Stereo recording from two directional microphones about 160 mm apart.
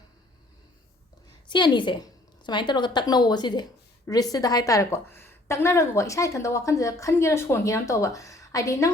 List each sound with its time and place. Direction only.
1.5 s a woman's voice: 30° left (ahead or behind)